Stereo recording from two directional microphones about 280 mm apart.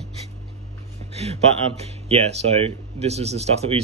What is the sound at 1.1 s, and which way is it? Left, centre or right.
Speech, right.